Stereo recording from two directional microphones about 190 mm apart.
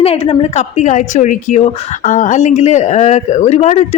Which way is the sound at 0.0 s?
30° left (ahead or behind).